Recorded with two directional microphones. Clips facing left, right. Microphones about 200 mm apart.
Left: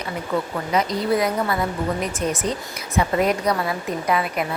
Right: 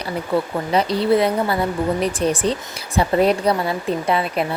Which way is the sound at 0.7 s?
30° right (ahead or behind).